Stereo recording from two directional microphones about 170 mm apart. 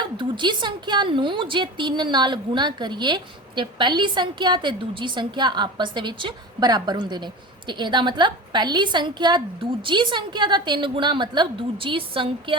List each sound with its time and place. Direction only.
0.2 s a woman's voice: 25° right (ahead or behind)